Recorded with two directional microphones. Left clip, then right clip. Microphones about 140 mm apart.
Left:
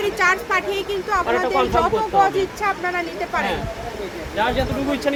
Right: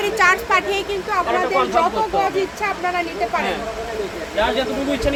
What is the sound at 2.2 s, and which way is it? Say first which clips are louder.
Speech: left 1 dB; centre (ahead or behind).